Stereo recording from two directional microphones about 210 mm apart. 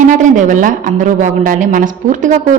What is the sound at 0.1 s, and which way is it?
A woman's voice, 35° right (ahead or behind).